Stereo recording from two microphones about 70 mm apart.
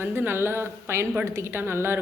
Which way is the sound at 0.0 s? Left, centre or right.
Right.